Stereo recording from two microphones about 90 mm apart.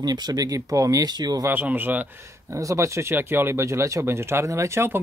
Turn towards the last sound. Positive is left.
turn(degrees=-30)  # may be behind; listen again after turning